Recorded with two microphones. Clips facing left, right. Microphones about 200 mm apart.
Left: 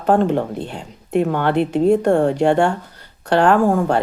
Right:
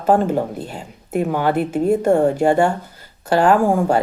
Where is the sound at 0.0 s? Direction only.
5° right (ahead or behind).